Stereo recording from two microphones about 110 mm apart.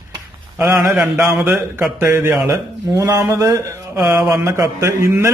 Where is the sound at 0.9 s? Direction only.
10° right (ahead or behind).